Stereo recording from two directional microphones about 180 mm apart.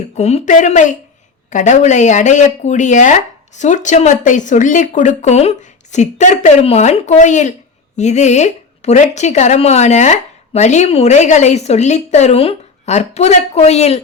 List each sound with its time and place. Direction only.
0.2 s speech: 35° left (ahead or behind)